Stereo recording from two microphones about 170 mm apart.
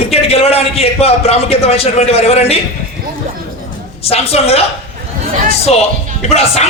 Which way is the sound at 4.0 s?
35° left (ahead or behind).